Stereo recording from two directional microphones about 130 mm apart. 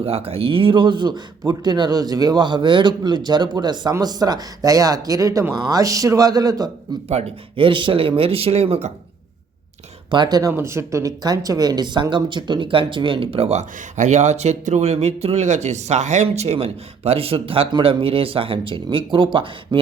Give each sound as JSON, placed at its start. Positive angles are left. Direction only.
{"t": 0.0, "sound": "speech", "side_deg": -50}
{"t": 7.1, "sound": "speech", "side_deg": -50}
{"t": 10.1, "sound": "speech", "side_deg": -35}